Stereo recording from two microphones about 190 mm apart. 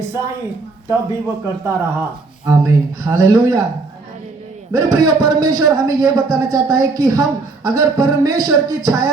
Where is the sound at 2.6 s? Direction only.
15° right (ahead or behind).